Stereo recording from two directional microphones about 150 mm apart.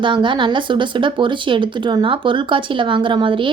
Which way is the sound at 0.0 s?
30° right (ahead or behind).